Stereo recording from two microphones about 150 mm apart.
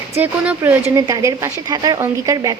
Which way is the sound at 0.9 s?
20° right (ahead or behind).